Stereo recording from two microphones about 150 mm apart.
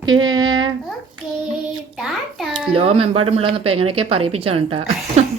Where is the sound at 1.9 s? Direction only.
Centre (ahead or behind).